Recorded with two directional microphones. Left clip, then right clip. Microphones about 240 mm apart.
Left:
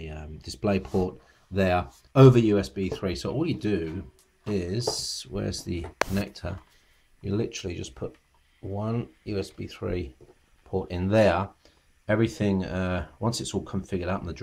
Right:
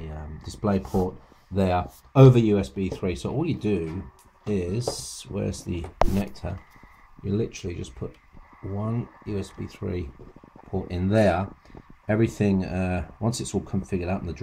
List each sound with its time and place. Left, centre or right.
0.4 s speech: centre
3.0 s speech: left
3.4 s speech: centre